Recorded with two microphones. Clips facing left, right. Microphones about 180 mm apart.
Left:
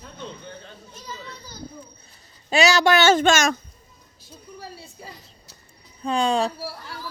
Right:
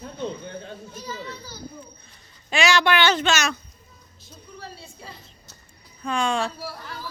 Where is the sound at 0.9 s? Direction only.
5° right (ahead or behind).